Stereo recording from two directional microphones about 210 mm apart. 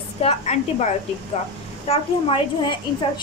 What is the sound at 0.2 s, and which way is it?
A woman's voice, 30° left (ahead or behind).